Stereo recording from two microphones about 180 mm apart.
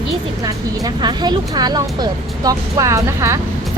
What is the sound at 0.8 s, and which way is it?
Speech, 25° right (ahead or behind).